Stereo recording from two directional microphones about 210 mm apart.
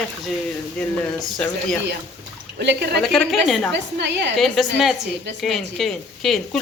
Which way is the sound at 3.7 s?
55° right (ahead or behind).